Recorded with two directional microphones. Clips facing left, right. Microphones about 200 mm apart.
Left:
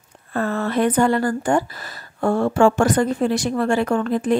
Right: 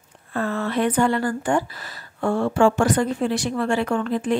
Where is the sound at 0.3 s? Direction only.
45° left (ahead or behind).